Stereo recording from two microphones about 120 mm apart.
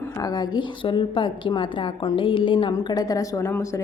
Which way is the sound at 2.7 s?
30° left (ahead or behind).